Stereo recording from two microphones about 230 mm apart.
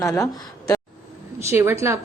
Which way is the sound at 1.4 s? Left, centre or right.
Centre.